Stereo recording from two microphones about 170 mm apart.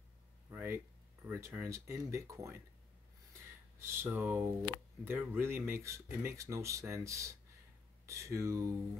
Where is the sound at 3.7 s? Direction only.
15° right (ahead or behind).